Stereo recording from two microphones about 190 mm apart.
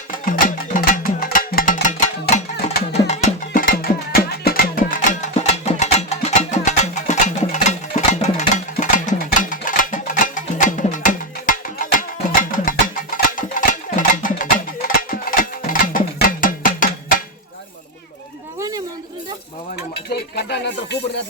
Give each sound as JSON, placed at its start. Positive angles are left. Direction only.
{"t": 0.3, "sound": "music", "side_deg": 45}
{"t": 3.1, "sound": "music", "side_deg": 35}
{"t": 20.1, "sound": "music", "side_deg": 60}